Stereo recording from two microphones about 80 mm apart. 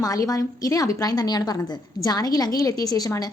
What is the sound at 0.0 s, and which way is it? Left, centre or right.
A woman's voice, left.